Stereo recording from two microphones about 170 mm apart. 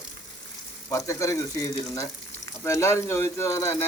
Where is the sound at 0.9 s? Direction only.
20° left (ahead or behind).